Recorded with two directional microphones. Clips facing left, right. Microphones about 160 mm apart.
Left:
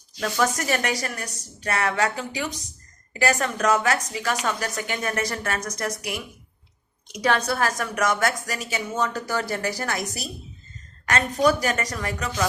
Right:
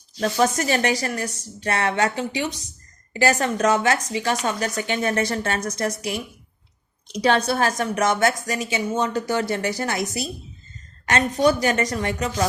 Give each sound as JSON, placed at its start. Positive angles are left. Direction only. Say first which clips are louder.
{"t": 0.2, "sound": "a woman's voice", "louder": "right 3 dB", "side_deg": -30}